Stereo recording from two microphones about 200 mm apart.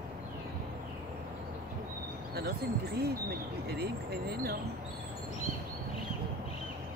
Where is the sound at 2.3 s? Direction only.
50° right (ahead or behind).